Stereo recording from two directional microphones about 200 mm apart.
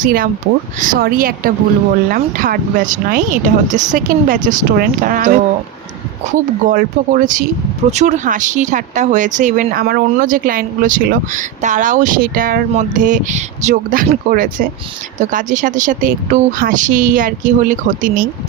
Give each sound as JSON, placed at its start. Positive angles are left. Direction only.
{"t": 0.0, "sound": "speech", "side_deg": -45}